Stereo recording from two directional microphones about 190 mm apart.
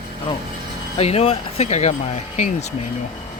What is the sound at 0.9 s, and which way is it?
Speech, 30° left (ahead or behind).